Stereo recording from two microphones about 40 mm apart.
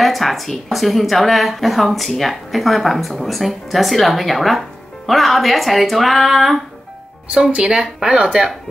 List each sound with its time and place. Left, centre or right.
0.0 s a woman's voice: centre
7.5 s speech: right